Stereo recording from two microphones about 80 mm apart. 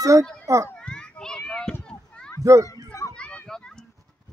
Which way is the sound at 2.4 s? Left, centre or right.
Right.